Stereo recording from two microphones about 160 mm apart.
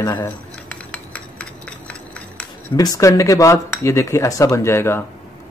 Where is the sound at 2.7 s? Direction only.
25° left (ahead or behind).